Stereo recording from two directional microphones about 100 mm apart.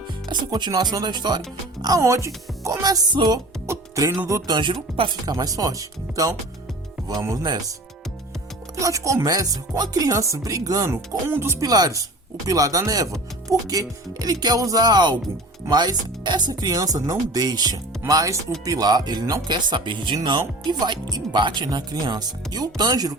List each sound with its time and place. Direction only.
0.3 s speech: 45° right (ahead or behind)
1.8 s speech: 35° right (ahead or behind)
3.7 s music: 35° right (ahead or behind)
4.3 s speech: 30° right (ahead or behind)
4.5 s speech: 55° right (ahead or behind)
5.2 s speech: 40° right (ahead or behind)
8.7 s speech: 35° right (ahead or behind)
11.6 s speech: 40° right (ahead or behind)